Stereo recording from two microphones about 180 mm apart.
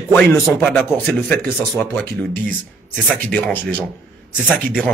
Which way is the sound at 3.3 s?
10° left (ahead or behind).